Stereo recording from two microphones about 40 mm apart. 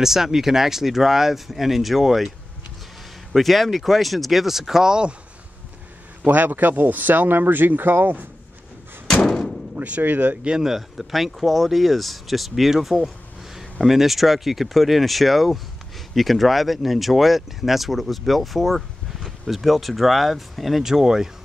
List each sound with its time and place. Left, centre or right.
0.0 s speech: centre
3.3 s speech: centre
6.2 s speech: right
9.0 s thump: centre
9.8 s speech: right
10.6 s speech: centre